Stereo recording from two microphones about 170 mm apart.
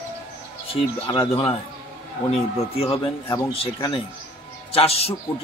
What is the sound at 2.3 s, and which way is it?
Music, 35° left (ahead or behind).